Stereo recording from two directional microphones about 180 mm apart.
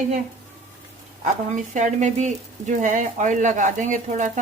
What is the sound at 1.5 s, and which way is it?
Speech, 40° right (ahead or behind).